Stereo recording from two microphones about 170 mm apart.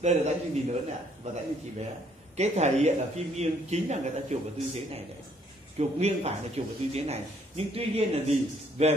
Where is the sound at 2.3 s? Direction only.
40° right (ahead or behind).